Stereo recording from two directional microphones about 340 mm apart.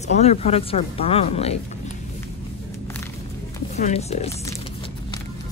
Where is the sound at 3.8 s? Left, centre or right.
Centre.